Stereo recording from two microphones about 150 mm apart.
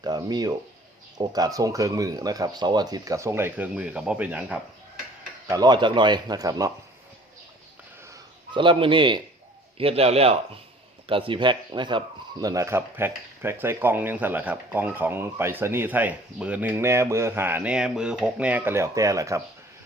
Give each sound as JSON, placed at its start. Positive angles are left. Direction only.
{"t": 0.0, "sound": "speech", "side_deg": -25}
{"t": 5.5, "sound": "speech", "side_deg": -25}
{"t": 8.5, "sound": "speech", "side_deg": -35}